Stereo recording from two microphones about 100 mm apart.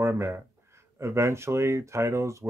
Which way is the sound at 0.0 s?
25° right (ahead or behind).